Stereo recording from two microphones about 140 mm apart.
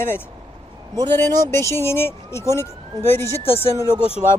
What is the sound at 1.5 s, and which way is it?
Speech, 20° left (ahead or behind).